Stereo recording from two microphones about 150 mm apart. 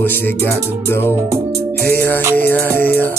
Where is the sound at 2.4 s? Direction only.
10° left (ahead or behind).